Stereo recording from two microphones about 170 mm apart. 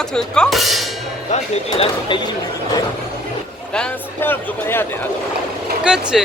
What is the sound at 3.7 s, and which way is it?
Speech, 10° left (ahead or behind).